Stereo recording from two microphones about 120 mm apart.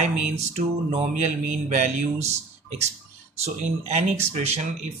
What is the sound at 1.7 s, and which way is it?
Speech, 90° right.